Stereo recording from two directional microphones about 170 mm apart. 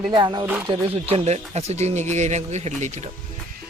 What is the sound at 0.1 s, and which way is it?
Speech, 25° right (ahead or behind).